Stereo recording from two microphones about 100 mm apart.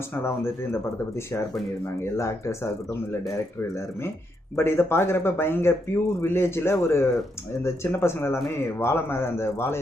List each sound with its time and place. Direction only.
0.2 s speech: 25° left (ahead or behind)
4.5 s speech: 25° left (ahead or behind)